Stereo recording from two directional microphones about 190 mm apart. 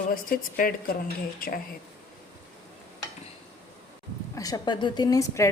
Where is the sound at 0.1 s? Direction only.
50° left (ahead or behind).